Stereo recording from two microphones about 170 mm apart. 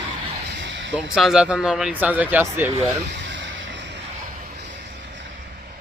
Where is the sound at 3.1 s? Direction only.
90° right.